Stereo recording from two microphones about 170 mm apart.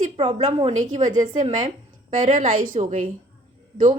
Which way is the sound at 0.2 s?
35° right (ahead or behind).